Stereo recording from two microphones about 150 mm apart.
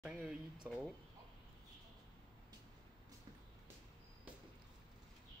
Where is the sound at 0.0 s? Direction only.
5° right (ahead or behind).